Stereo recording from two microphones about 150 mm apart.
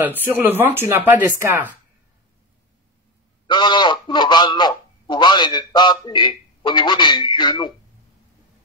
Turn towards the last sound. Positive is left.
turn(degrees=30)  # may be behind; listen again after turning